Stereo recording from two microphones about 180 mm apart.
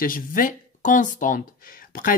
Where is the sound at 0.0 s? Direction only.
50° left (ahead or behind).